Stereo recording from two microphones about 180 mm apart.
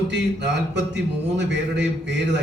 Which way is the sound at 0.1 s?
70° right (ahead or behind).